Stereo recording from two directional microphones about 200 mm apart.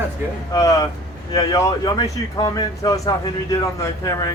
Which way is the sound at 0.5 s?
15° left (ahead or behind).